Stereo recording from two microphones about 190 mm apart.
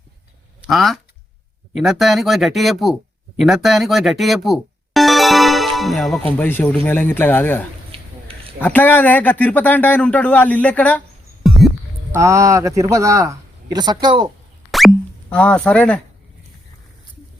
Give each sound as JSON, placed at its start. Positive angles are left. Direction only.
{"t": 0.7, "sound": "speech", "side_deg": 0}
{"t": 7.9, "sound": "a sound", "side_deg": -30}
{"t": 8.6, "sound": "speech", "side_deg": 10}
{"t": 11.4, "sound": "music", "side_deg": 0}
{"t": 12.1, "sound": "a man's voice", "side_deg": -15}
{"t": 14.7, "sound": "speech", "side_deg": 0}